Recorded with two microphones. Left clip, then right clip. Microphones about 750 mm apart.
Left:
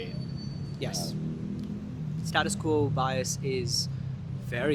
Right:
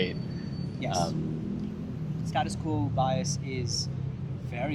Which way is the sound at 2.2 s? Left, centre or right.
Left.